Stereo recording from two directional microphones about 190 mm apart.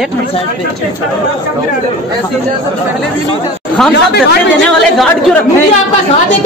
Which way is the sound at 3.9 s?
60° left (ahead or behind).